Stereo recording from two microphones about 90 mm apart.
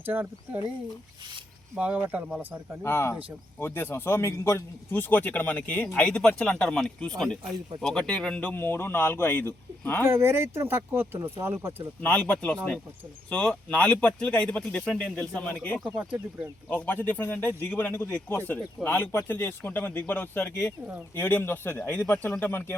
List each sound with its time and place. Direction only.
0.0 s speech: 20° right (ahead or behind)
1.7 s speech: 15° right (ahead or behind)
2.8 s speech: 30° left (ahead or behind)
6.1 s speech: 10° left (ahead or behind)
8.4 s speech: 20° left (ahead or behind)
10.1 s speech: 25° right (ahead or behind)
12.0 s speech: 20° left (ahead or behind)